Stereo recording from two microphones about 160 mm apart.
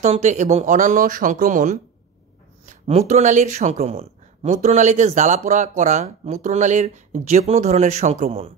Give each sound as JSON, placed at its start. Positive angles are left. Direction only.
{"t": 0.0, "sound": "speech", "side_deg": -45}